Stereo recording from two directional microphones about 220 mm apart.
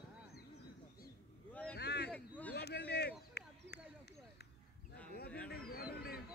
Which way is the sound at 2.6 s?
50° left (ahead or behind).